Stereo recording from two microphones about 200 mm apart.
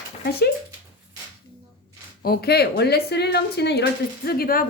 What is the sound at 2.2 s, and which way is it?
Speech, 50° left (ahead or behind).